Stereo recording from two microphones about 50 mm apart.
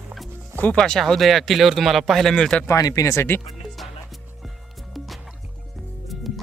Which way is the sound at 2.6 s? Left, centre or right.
Left.